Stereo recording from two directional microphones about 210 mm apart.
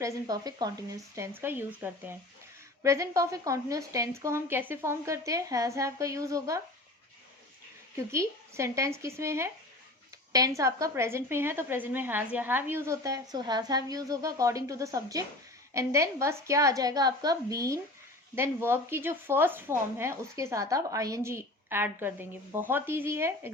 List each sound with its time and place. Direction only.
0.0 s a woman's voice: 15° right (ahead or behind)
7.9 s a woman's voice: 15° right (ahead or behind)